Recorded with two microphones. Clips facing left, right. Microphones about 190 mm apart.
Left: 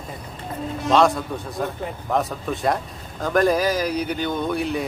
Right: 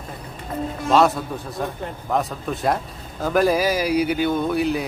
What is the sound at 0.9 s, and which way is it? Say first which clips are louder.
A man's voice: even; 5° right (ahead or behind).